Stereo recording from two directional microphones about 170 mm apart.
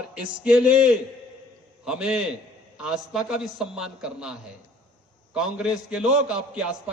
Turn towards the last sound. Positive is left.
turn(degrees=-5)  # may be behind; listen again after turning